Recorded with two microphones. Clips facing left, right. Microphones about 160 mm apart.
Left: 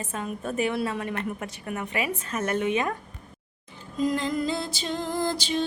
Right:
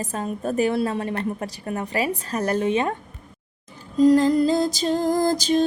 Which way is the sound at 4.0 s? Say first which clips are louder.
Right 10 dB; 35° right (ahead or behind).